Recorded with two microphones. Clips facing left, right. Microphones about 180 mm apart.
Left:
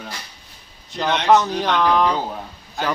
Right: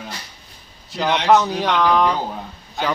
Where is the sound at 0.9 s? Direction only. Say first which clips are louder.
Even; centre (ahead or behind).